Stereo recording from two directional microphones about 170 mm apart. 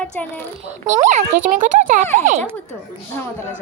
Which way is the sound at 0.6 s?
40° right (ahead or behind).